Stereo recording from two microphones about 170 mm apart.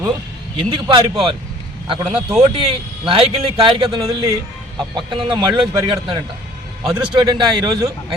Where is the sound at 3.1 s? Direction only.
30° right (ahead or behind).